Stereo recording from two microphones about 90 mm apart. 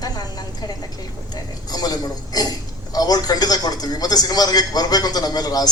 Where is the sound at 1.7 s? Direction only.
45° left (ahead or behind).